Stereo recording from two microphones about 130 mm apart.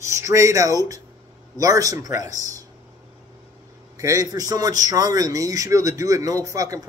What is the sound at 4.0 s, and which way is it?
Speech, 25° right (ahead or behind).